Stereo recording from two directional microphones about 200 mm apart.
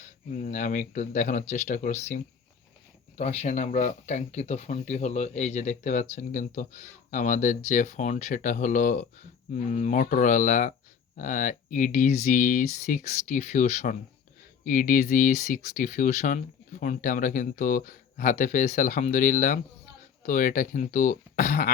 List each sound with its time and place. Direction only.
0.0 s speech: 35° left (ahead or behind)